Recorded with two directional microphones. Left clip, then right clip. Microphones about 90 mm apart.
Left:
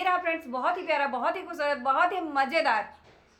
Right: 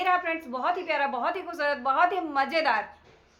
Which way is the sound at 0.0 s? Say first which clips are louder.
Right 1 dB; 20° right (ahead or behind).